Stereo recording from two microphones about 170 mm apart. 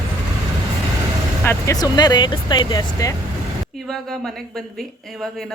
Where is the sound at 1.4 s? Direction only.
20° left (ahead or behind).